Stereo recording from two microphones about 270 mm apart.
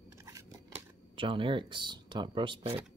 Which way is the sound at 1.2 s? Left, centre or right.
Centre.